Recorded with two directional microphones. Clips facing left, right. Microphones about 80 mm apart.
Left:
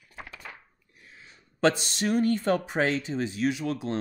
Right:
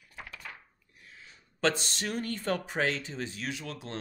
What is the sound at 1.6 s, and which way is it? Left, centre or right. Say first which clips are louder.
Speech: left 5 dB; centre.